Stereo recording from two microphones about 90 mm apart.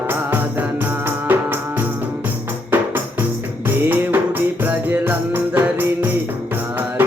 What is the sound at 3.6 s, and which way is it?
Music, 20° right (ahead or behind).